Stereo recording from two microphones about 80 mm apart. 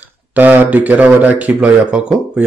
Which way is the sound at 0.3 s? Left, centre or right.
Right.